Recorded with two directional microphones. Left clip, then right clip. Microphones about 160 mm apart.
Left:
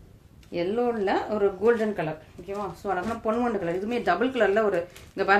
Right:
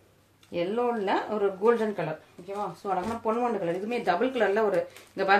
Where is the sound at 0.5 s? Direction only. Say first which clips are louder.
Left 1 dB; 30° left (ahead or behind).